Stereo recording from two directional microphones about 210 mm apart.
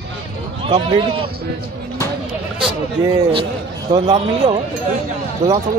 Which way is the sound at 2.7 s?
20° right (ahead or behind).